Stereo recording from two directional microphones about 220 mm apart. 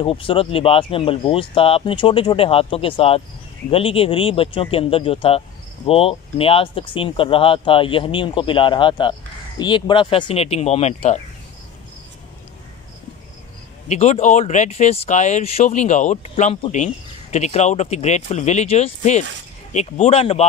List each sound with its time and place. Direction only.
0.0 s speech: 25° left (ahead or behind)
13.8 s speech: 30° left (ahead or behind)